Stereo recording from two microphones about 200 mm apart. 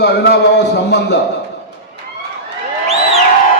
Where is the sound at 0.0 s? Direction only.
55° left (ahead or behind).